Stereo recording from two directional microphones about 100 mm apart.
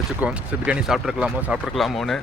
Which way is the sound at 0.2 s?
15° right (ahead or behind).